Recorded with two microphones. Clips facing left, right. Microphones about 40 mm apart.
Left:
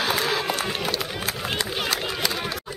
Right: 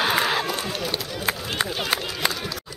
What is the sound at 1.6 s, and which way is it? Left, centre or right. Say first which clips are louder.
Run: right 3 dB; right.